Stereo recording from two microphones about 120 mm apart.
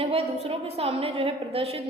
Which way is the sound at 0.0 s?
55° right (ahead or behind).